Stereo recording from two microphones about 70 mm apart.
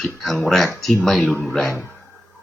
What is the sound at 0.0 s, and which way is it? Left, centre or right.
Speech, centre.